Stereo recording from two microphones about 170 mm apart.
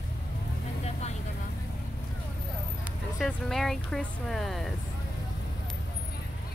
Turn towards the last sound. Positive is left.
turn(degrees=0)  # may be behind; listen again after turning